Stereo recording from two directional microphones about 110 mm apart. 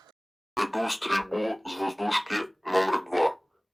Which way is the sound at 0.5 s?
Centre (ahead or behind).